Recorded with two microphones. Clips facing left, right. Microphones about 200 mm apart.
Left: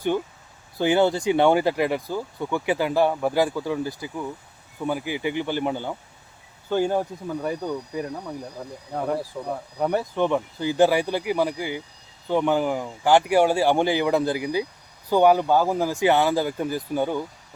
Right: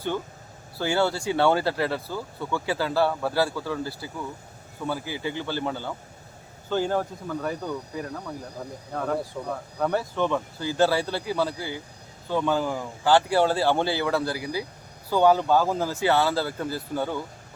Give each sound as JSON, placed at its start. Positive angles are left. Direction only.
{"t": 0.8, "sound": "speech", "side_deg": 20}